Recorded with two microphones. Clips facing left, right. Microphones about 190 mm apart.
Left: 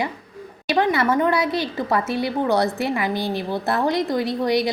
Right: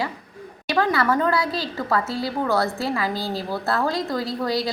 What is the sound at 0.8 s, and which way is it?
A woman's voice, 20° left (ahead or behind).